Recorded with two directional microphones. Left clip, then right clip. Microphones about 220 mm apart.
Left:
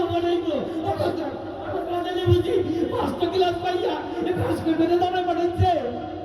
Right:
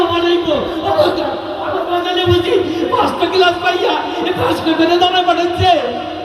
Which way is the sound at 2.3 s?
15° right (ahead or behind).